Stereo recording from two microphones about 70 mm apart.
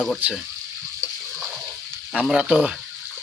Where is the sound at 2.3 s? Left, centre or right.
Centre.